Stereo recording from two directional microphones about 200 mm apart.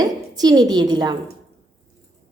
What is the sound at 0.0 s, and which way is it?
A woman's voice, 20° right (ahead or behind).